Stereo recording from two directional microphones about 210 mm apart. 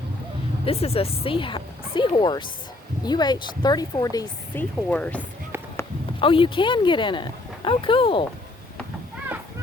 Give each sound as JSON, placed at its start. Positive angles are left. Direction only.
{"t": 0.6, "sound": "speech", "side_deg": 30}
{"t": 6.1, "sound": "speech", "side_deg": 25}